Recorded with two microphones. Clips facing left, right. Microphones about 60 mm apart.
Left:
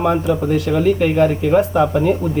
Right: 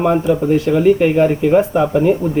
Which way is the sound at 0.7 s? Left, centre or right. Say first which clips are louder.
Right 3 dB; centre.